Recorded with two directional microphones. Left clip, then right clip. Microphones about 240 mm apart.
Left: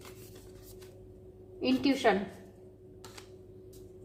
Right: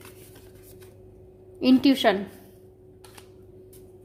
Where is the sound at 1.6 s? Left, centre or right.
Right.